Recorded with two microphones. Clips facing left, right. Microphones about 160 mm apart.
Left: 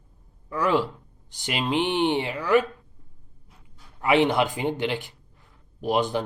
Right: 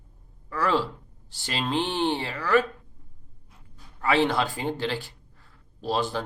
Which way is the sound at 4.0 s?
20° left (ahead or behind).